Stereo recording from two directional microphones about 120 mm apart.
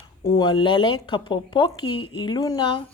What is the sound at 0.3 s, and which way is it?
Speech, 35° left (ahead or behind).